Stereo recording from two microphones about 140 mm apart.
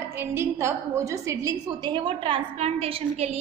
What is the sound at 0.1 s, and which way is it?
A woman's voice, 15° right (ahead or behind).